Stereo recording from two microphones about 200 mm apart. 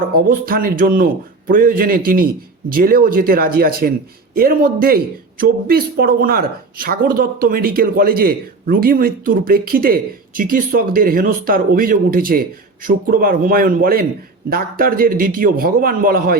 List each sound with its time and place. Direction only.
0.1 s speech: 45° right (ahead or behind)